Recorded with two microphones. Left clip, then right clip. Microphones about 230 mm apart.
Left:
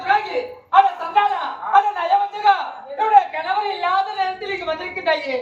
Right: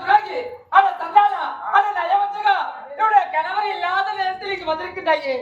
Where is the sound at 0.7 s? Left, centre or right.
Right.